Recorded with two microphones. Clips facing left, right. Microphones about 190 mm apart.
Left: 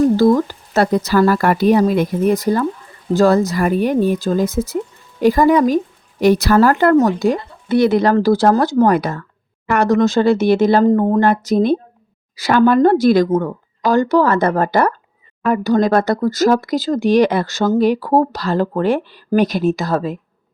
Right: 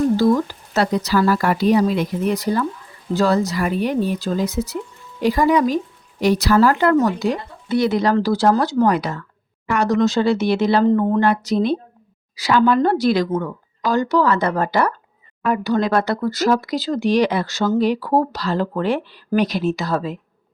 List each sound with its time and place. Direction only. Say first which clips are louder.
0.7 s speech: left 4 dB; 50° left (ahead or behind)